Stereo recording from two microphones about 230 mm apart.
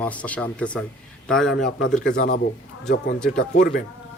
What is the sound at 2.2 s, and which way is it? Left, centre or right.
Speech, left.